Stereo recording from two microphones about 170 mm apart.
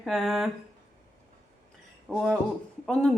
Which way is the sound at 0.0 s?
Centre (ahead or behind).